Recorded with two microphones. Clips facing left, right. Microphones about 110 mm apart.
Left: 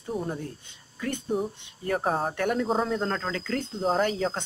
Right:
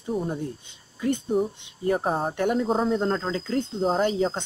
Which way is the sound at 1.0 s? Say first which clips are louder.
Right 6 dB; 20° right (ahead or behind).